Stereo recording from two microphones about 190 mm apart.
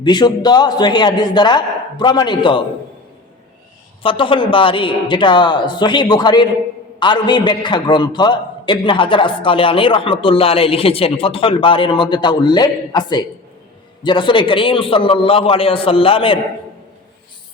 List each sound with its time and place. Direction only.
0.0 s a man's voice: 20° left (ahead or behind)
4.0 s a man's voice: 25° left (ahead or behind)